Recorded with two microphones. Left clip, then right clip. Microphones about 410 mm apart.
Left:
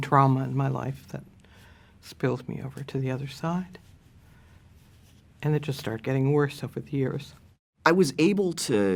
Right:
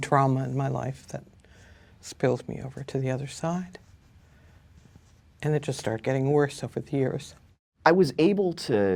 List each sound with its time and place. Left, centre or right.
0.0 s speech: right
5.4 s speech: right
7.8 s speech: centre